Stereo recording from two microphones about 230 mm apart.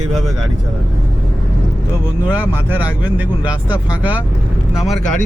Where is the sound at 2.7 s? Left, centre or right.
Centre.